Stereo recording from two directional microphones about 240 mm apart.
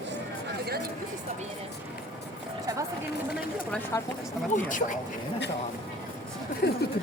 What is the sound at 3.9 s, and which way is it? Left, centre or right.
Speech, centre.